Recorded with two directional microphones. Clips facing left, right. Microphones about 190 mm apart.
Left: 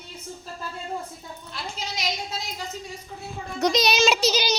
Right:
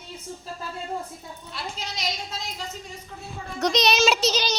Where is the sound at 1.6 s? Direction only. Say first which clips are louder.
Right 1 dB; centre (ahead or behind).